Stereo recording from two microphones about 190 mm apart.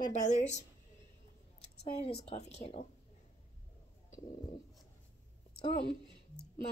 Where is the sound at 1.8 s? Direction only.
35° left (ahead or behind).